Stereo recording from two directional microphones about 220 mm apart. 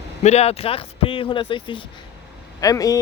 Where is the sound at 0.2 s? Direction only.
30° left (ahead or behind).